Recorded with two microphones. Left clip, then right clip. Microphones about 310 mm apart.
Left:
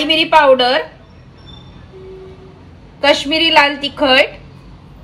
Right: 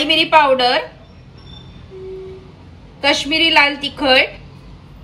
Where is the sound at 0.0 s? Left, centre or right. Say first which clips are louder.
Left 2 dB; right.